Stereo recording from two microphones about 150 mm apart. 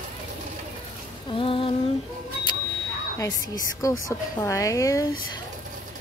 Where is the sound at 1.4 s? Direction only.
35° left (ahead or behind).